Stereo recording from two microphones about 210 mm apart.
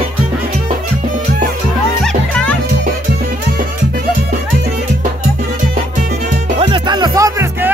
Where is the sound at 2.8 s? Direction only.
45° right (ahead or behind).